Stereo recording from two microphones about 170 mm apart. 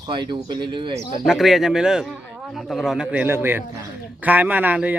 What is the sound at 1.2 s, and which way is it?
A man's voice, centre (ahead or behind).